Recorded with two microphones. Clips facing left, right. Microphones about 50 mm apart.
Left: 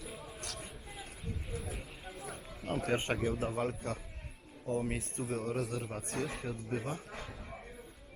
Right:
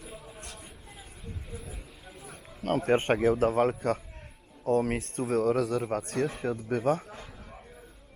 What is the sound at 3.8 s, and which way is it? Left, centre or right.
Speech, right.